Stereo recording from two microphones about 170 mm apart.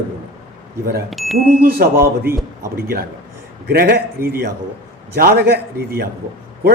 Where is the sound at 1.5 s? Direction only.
60° right (ahead or behind).